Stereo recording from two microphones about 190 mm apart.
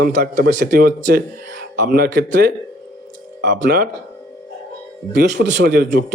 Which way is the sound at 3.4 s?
55° right (ahead or behind).